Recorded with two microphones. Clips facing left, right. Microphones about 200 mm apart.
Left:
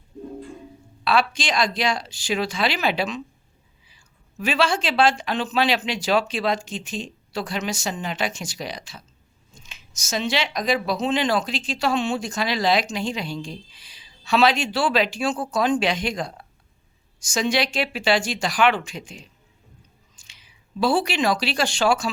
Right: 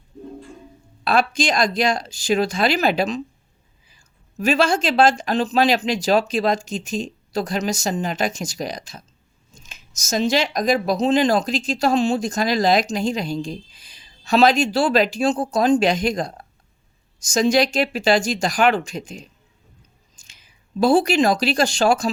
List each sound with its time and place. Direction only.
1.0 s speech: 45° right (ahead or behind)